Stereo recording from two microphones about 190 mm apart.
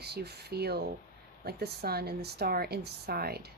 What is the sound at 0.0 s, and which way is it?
Speech, 60° right (ahead or behind).